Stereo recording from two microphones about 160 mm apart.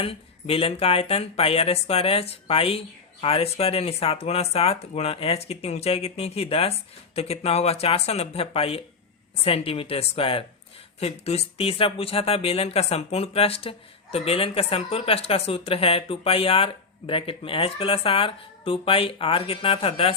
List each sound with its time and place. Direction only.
0.0 s speech: 35° left (ahead or behind)